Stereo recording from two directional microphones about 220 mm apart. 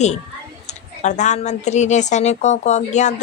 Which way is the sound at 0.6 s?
30° left (ahead or behind).